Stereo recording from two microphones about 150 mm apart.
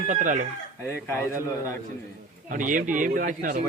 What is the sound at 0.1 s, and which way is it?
Speech, 60° right (ahead or behind).